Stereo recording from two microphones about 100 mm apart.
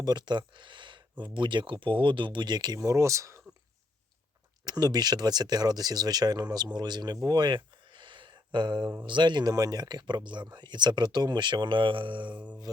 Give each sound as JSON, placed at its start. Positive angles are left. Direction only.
{"t": 0.0, "sound": "speech", "side_deg": -45}
{"t": 4.6, "sound": "speech", "side_deg": -40}
{"t": 12.7, "sound": "mantra", "side_deg": -40}